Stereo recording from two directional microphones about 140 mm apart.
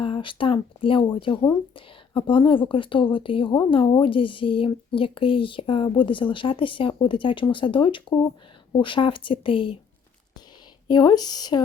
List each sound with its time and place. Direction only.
0.0 s speech: 35° left (ahead or behind)
10.8 s speech: 30° left (ahead or behind)